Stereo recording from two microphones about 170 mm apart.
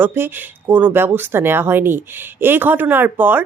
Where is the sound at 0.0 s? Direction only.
15° right (ahead or behind).